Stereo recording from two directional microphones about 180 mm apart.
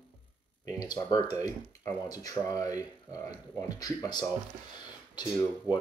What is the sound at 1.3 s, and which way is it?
Speech, 15° left (ahead or behind).